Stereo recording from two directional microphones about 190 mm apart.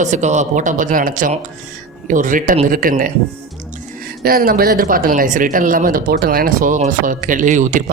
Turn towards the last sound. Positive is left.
turn(degrees=-40)  # may be behind; listen again after turning